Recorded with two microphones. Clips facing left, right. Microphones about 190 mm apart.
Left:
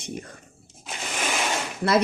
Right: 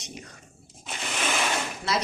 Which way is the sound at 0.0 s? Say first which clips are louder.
Left 7 dB; 50° left (ahead or behind).